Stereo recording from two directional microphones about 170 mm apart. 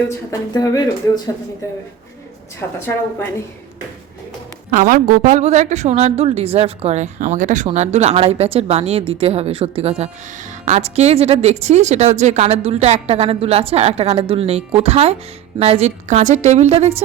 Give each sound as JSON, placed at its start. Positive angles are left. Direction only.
{"t": 0.3, "sound": "speech", "side_deg": 20}
{"t": 2.6, "sound": "a woman's voice", "side_deg": 15}
{"t": 4.7, "sound": "a woman's voice", "side_deg": -55}